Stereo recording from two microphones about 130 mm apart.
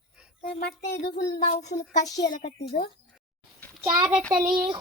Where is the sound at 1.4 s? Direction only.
60° left (ahead or behind).